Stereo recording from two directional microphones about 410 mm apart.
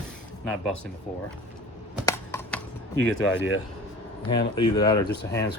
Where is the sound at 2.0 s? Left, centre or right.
Centre.